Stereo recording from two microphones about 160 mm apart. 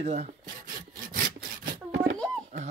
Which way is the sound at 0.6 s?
60° right (ahead or behind).